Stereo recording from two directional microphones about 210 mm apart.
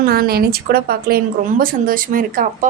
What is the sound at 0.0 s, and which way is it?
A woman's voice, 45° right (ahead or behind).